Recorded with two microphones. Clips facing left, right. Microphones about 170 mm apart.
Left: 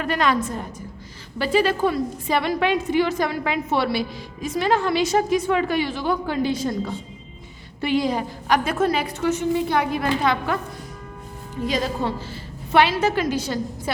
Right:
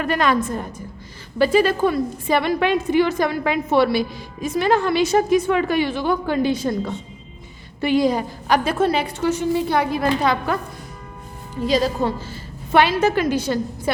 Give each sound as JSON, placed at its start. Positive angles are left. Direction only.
{"t": 0.0, "sound": "a woman's voice", "side_deg": -50}
{"t": 1.4, "sound": "a woman's voice", "side_deg": -45}
{"t": 7.8, "sound": "a woman's voice", "side_deg": -45}
{"t": 11.6, "sound": "a woman's voice", "side_deg": -35}